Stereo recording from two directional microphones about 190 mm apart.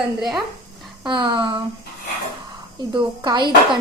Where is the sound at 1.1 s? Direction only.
25° right (ahead or behind).